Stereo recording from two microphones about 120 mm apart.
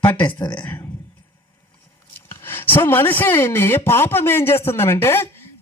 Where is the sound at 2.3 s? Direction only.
20° left (ahead or behind).